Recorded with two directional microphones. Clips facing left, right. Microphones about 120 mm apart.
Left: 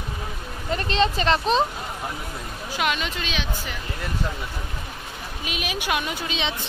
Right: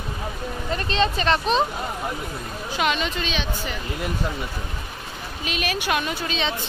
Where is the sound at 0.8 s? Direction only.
30° left (ahead or behind).